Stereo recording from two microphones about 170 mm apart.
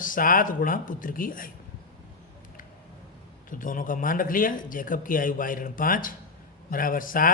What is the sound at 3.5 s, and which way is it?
A man's voice, 50° left (ahead or behind).